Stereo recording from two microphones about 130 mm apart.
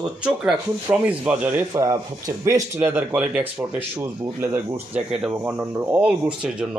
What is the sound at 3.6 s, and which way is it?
Speech, 20° right (ahead or behind).